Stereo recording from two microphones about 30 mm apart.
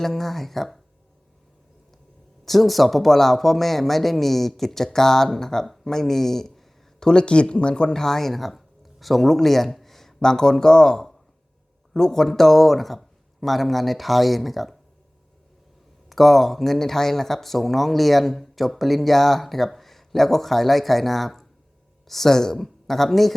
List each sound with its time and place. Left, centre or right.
0.0 s speech: centre
2.4 s speech: centre
7.0 s speech: left
7.9 s speech: centre
10.2 s speech: centre
16.0 s speech: centre